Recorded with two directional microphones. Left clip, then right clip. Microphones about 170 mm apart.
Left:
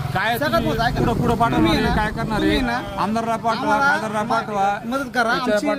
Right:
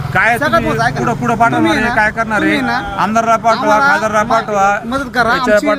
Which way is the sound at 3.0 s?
20° right (ahead or behind).